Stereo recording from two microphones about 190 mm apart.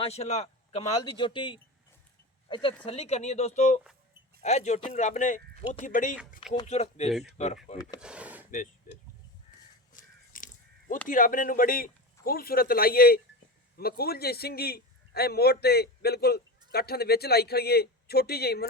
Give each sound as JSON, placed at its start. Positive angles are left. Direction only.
{"t": 0.0, "sound": "a man's voice", "side_deg": 35}
{"t": 0.8, "sound": "a man's voice", "side_deg": 25}
{"t": 7.9, "sound": "speech", "side_deg": -5}
{"t": 9.9, "sound": "crow", "side_deg": 45}
{"t": 11.1, "sound": "a man's voice", "side_deg": 45}